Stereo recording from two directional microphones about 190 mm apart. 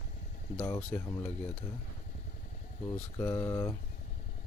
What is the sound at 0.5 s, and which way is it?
Mantra, 5° left (ahead or behind).